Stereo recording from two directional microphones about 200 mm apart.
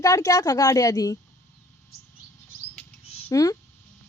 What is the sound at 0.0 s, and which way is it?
A woman's voice, 15° left (ahead or behind).